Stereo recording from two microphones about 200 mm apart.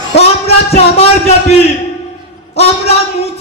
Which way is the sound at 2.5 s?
30° left (ahead or behind).